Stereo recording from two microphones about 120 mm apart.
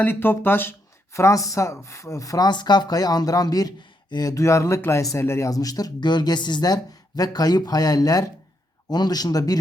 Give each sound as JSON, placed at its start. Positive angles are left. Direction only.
{"t": 0.0, "sound": "speech", "side_deg": 15}